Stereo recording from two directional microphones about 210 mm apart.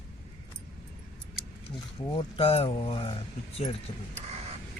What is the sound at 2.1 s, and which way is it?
Speech, 30° left (ahead or behind).